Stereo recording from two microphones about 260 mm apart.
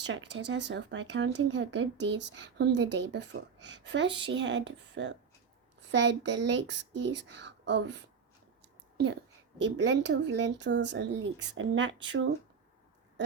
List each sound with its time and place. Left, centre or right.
0.0 s speech: right
9.6 s speech: right